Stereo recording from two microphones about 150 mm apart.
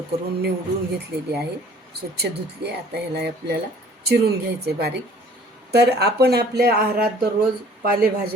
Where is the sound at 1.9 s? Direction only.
90° right.